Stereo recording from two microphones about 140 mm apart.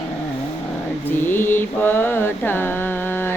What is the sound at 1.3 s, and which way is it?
Mantra, 15° left (ahead or behind).